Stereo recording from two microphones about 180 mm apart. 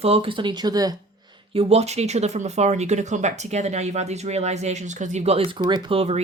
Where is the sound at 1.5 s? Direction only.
35° right (ahead or behind).